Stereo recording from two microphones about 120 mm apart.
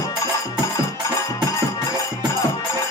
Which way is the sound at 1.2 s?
30° left (ahead or behind).